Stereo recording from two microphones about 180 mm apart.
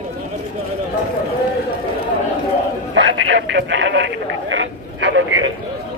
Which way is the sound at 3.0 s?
90° right.